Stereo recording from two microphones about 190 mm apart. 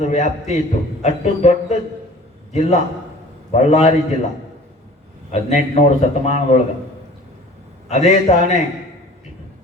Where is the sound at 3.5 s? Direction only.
35° left (ahead or behind).